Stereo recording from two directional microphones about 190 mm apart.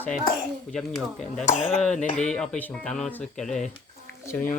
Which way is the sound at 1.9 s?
40° left (ahead or behind).